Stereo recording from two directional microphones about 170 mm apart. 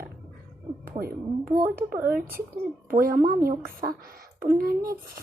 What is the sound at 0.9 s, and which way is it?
Speech, 60° right (ahead or behind).